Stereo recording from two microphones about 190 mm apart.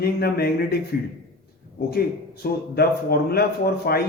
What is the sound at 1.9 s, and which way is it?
Speech, 55° left (ahead or behind).